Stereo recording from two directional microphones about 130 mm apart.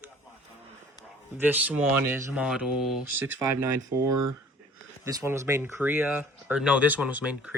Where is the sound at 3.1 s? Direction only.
15° right (ahead or behind).